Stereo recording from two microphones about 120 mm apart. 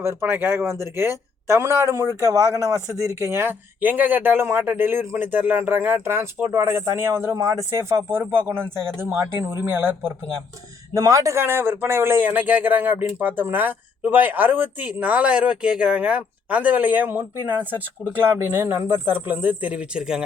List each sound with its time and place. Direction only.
0.0 s a man's voice: 20° right (ahead or behind); by 20.2 s 5° right (ahead or behind)